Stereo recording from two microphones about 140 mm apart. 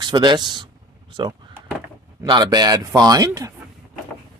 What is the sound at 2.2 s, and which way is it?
Speech, 30° right (ahead or behind).